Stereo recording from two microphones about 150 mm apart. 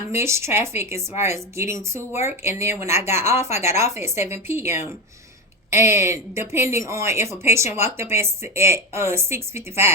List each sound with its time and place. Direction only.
0.1 s speech: 20° right (ahead or behind)